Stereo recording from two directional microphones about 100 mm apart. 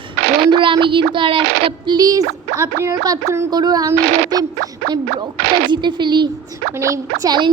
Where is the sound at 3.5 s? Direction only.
40° right (ahead or behind).